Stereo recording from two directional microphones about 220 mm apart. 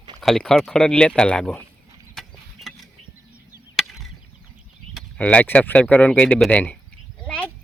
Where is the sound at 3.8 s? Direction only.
Centre (ahead or behind).